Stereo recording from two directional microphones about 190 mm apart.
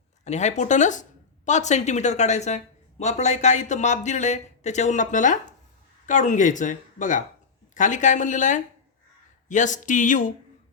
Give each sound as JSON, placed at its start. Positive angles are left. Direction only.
{"t": 0.3, "sound": "speech", "side_deg": 35}